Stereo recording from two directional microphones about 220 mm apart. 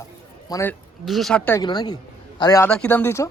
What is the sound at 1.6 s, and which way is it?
A man's voice, 20° left (ahead or behind).